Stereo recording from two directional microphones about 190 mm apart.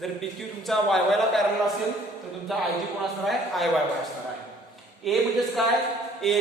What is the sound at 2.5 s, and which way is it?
Speech, centre (ahead or behind).